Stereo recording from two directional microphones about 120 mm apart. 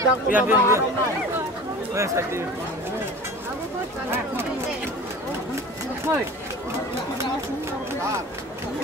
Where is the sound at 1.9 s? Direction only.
25° right (ahead or behind).